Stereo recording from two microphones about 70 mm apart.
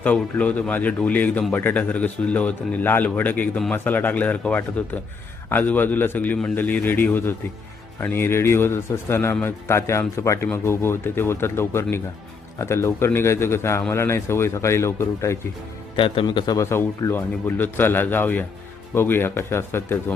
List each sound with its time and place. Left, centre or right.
0.0 s speech: left
10.4 s speech: left
16.6 s speech: left